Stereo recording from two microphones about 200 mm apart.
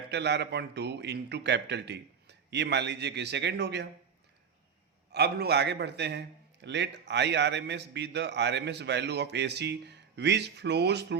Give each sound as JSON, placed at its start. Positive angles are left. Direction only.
{"t": 0.1, "sound": "a man's voice", "side_deg": -60}
{"t": 5.1, "sound": "a man's voice", "side_deg": -55}